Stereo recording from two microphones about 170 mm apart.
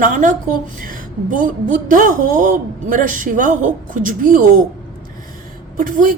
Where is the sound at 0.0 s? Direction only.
50° right (ahead or behind).